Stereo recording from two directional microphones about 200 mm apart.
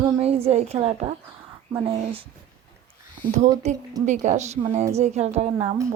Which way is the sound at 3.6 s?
35° right (ahead or behind).